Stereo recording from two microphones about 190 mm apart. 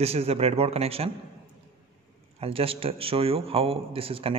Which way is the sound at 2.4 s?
30° right (ahead or behind).